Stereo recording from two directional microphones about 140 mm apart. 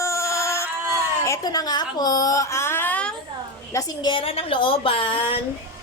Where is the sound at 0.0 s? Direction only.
20° left (ahead or behind).